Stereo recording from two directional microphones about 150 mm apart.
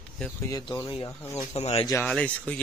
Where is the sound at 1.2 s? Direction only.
15° left (ahead or behind).